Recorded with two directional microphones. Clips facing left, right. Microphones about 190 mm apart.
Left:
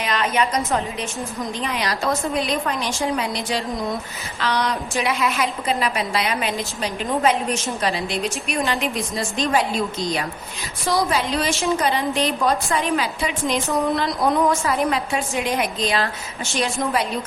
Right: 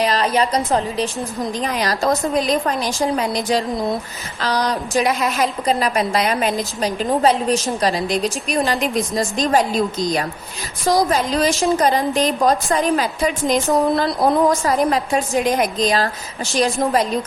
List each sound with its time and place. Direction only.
0.0 s a woman's voice: 35° right (ahead or behind)